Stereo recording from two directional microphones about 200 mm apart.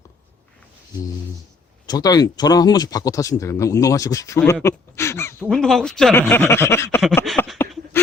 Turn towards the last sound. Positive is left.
turn(degrees=0)  # may be behind; listen again after turning